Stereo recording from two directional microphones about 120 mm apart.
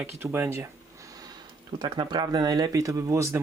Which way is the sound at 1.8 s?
40° right (ahead or behind).